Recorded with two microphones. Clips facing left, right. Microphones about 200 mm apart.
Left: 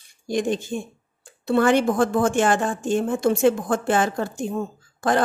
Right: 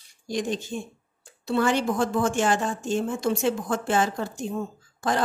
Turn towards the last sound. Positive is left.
turn(degrees=55)  # may be behind; listen again after turning